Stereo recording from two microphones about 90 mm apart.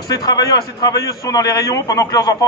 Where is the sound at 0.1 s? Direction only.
45° left (ahead or behind).